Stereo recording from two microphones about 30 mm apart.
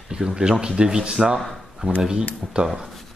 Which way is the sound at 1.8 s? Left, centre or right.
Right.